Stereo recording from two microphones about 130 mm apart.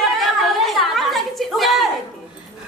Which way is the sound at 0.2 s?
Centre (ahead or behind).